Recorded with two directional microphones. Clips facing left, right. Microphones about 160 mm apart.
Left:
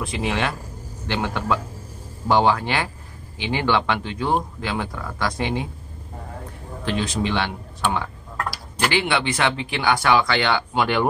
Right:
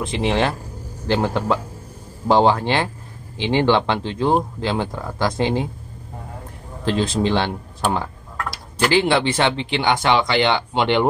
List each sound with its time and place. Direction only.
0.0 s speech: 25° right (ahead or behind)
6.8 s speech: 30° right (ahead or behind)